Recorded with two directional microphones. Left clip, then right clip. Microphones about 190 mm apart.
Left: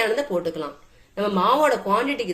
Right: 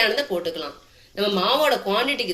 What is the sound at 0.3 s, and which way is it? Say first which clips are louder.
Speech: left 1 dB; 60° left (ahead or behind).